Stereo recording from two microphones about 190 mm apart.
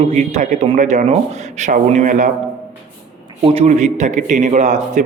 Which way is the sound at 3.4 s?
30° right (ahead or behind).